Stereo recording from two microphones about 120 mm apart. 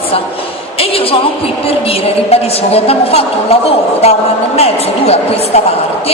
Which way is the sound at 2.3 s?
55° left (ahead or behind).